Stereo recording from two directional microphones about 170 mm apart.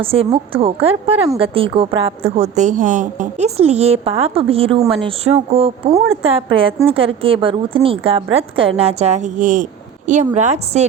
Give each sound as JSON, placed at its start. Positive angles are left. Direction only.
{"t": 0.0, "sound": "a woman's voice", "side_deg": -35}